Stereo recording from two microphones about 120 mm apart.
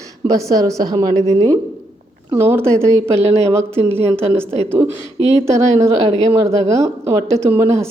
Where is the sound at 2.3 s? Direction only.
20° right (ahead or behind).